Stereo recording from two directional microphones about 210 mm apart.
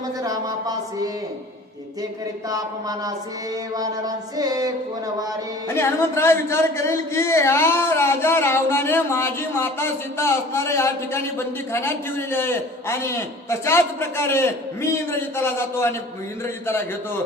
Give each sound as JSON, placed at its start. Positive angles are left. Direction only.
{"t": 0.2, "sound": "a sound", "side_deg": -15}
{"t": 2.5, "sound": "music", "side_deg": -15}
{"t": 5.6, "sound": "a man's voice", "side_deg": 10}